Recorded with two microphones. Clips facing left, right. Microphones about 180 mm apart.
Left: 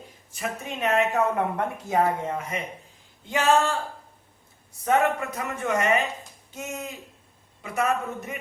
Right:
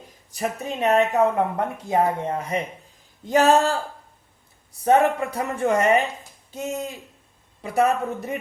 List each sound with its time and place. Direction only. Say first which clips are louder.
0.3 s speech: right 5 dB; 35° right (ahead or behind)